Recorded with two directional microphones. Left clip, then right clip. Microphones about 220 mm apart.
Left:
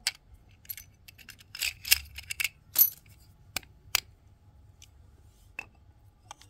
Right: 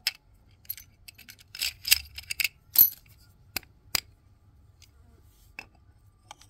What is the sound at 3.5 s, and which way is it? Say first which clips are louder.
Scissors: even; centre (ahead or behind).